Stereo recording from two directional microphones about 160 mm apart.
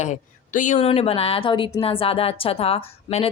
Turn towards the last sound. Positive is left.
turn(degrees=40)  # may be behind; listen again after turning